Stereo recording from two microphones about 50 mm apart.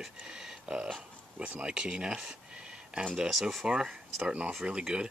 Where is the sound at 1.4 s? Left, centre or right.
Centre.